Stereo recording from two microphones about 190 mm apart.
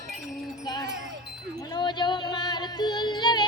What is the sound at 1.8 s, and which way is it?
Yodeling, 25° left (ahead or behind).